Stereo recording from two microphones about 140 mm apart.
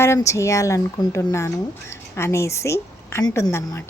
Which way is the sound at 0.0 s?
20° left (ahead or behind).